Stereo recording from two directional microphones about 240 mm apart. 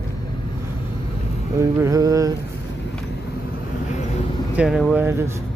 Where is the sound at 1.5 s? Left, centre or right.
Centre.